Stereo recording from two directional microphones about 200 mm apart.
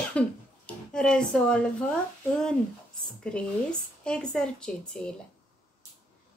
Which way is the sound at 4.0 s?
5° left (ahead or behind).